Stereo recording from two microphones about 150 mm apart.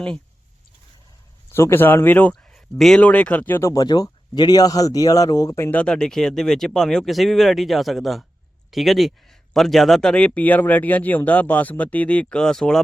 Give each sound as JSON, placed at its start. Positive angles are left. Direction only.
{"t": 1.5, "sound": "speech", "side_deg": 15}
{"t": 5.8, "sound": "speech", "side_deg": 5}